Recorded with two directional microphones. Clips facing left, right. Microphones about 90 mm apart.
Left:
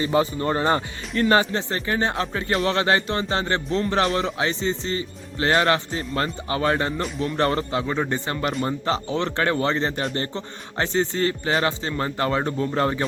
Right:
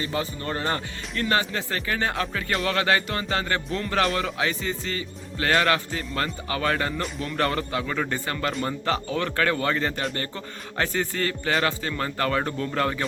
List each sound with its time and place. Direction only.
0.0 s music: 25° left (ahead or behind)